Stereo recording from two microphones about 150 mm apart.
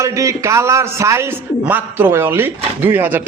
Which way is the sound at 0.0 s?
20° right (ahead or behind).